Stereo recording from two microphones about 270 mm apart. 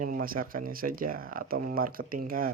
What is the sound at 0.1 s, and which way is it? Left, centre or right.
Speech, right.